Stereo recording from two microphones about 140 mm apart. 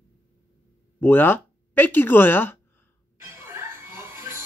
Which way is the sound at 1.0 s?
15° left (ahead or behind).